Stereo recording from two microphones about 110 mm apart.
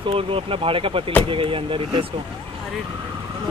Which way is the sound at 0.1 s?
55° right (ahead or behind).